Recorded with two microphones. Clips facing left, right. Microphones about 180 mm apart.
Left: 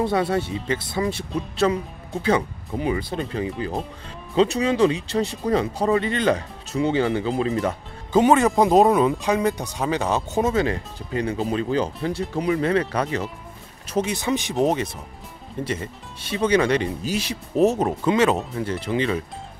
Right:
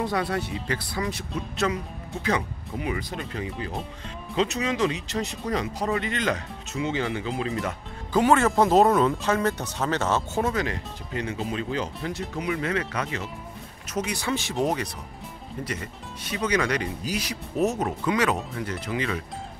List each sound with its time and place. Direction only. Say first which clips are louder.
0.0 s speech: left 5 dB; 25° left (ahead or behind)
8.1 s speech: left 4 dB; 20° left (ahead or behind)
13.9 s speech: left 5 dB; 25° left (ahead or behind)